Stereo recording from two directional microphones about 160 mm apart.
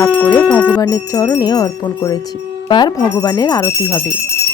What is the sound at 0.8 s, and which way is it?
Music, 20° left (ahead or behind).